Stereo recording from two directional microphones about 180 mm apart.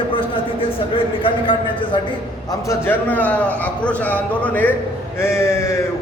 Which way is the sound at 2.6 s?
10° left (ahead or behind).